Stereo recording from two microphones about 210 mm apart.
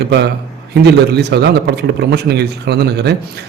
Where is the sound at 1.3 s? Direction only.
60° right (ahead or behind).